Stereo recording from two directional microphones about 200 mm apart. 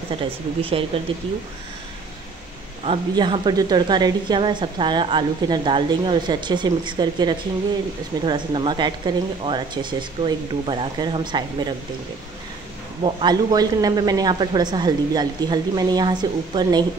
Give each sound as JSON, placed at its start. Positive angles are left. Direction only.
{"t": 0.1, "sound": "speech", "side_deg": -25}
{"t": 2.8, "sound": "speech", "side_deg": -30}
{"t": 13.0, "sound": "speech", "side_deg": -20}